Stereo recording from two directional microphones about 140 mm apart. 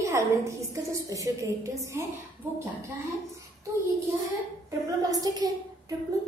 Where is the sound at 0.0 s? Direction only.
20° right (ahead or behind).